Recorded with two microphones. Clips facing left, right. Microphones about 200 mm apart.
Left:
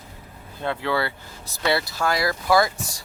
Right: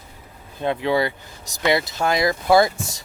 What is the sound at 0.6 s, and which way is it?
Speech, 15° right (ahead or behind).